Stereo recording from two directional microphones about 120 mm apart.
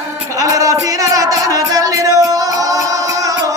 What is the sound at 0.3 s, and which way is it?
Music, 25° right (ahead or behind).